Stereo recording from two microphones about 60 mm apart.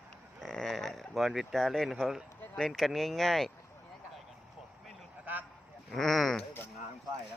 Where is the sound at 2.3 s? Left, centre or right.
Left.